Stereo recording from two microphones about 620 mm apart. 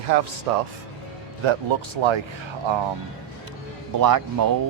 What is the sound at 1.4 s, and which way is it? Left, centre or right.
Speech, right.